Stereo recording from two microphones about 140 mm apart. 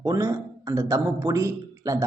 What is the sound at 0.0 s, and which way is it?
A man's voice, 25° right (ahead or behind).